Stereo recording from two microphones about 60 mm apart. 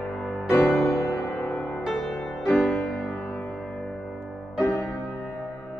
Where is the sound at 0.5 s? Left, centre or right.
Left.